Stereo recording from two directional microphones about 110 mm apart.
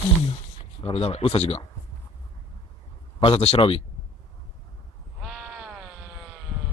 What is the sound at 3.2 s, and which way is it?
Speech, 65° left (ahead or behind).